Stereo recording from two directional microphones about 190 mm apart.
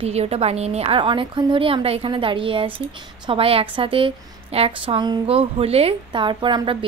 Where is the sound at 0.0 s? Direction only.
35° right (ahead or behind).